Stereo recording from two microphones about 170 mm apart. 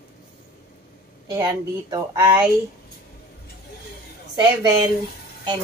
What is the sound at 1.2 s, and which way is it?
A woman's voice, 20° right (ahead or behind).